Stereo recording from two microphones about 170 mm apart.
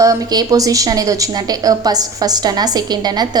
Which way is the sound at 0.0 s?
20° right (ahead or behind).